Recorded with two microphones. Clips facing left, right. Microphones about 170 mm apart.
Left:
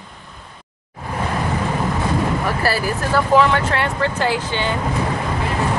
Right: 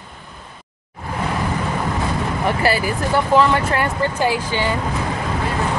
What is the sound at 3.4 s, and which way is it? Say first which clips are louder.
Speech: even; 5° right (ahead or behind).